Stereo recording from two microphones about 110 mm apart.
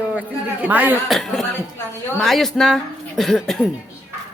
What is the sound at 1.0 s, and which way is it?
Speech, centre (ahead or behind).